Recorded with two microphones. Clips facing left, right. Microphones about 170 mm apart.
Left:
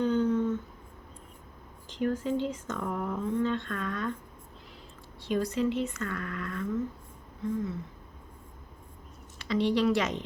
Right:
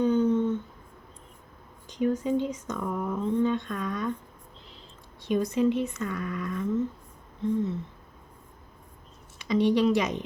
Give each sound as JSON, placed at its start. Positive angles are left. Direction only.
{"t": 0.0, "sound": "humming", "side_deg": -20}
{"t": 1.9, "sound": "speech", "side_deg": -15}
{"t": 5.2, "sound": "speech", "side_deg": -20}
{"t": 9.4, "sound": "speech", "side_deg": -15}